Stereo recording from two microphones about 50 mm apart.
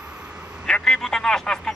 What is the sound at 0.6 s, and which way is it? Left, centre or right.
Speech, centre.